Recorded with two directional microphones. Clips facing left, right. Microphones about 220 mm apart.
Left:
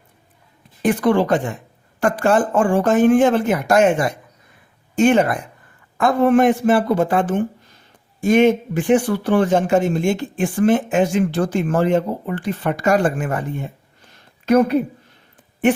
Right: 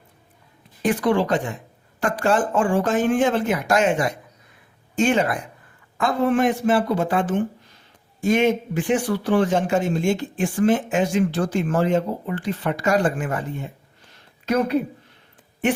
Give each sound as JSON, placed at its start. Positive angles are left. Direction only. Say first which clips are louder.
{"t": 0.8, "sound": "a woman's voice", "louder": "left 3 dB", "side_deg": 55}